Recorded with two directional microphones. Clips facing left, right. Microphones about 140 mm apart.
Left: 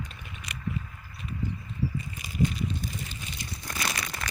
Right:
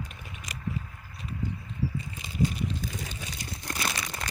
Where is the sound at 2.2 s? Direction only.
25° right (ahead or behind).